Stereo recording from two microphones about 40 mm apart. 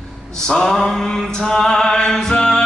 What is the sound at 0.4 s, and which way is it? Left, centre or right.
Mantra, centre.